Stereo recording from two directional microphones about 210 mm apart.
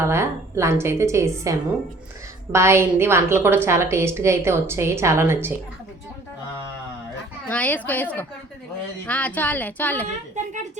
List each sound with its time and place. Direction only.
0.0 s a woman's voice: 15° right (ahead or behind)
7.4 s a woman's voice: 5° left (ahead or behind)
10.4 s speech: 35° right (ahead or behind)